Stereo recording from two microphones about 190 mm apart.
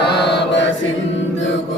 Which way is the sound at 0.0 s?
60° left (ahead or behind).